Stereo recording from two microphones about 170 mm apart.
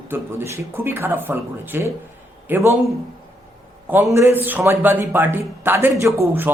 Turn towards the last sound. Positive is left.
turn(degrees=-15)  # may be behind; listen again after turning